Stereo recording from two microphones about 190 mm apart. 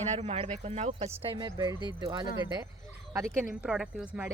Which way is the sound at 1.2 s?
20° right (ahead or behind).